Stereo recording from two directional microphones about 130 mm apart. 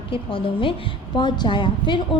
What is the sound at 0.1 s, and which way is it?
A woman's voice, 40° left (ahead or behind).